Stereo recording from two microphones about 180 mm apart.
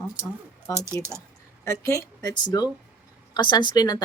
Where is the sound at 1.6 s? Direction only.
15° left (ahead or behind).